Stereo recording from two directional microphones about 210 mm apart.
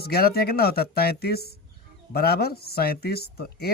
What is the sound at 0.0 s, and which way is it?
Speech, 45° left (ahead or behind).